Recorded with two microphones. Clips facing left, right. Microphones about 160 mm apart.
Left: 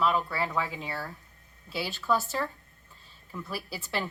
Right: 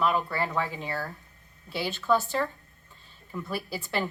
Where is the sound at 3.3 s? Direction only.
Centre (ahead or behind).